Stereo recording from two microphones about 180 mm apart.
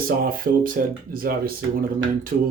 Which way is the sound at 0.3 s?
50° right (ahead or behind).